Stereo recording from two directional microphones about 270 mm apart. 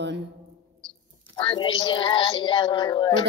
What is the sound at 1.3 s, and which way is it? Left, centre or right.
A woman's voice, centre.